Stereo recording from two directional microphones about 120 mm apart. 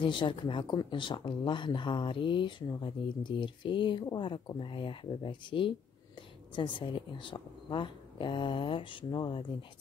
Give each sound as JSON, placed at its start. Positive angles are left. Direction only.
{"t": 0.0, "sound": "speech", "side_deg": 45}